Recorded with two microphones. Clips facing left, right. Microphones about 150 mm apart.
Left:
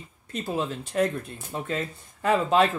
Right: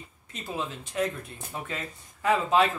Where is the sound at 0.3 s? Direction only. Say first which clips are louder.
Left 5 dB; 40° left (ahead or behind).